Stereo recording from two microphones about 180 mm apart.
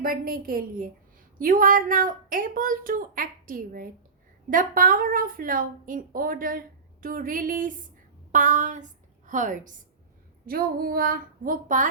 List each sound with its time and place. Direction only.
0.0 s a woman's voice: 50° right (ahead or behind)
10.4 s a woman's voice: 55° right (ahead or behind)